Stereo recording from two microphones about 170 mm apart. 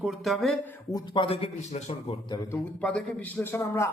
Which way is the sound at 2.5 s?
5° left (ahead or behind).